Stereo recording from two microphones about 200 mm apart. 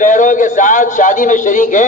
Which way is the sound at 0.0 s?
40° left (ahead or behind).